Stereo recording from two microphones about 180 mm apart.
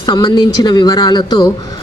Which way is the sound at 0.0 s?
25° left (ahead or behind).